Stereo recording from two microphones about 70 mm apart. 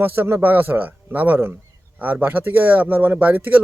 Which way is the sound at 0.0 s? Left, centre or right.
Right.